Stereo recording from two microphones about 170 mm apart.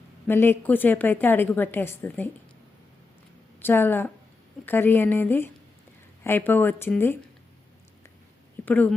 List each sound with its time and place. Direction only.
0.3 s a woman's voice: 15° left (ahead or behind)
3.6 s a woman's voice: 10° left (ahead or behind)
8.6 s a woman's voice: 10° left (ahead or behind)